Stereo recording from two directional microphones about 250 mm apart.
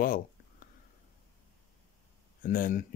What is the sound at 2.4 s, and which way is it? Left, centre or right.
Speech, left.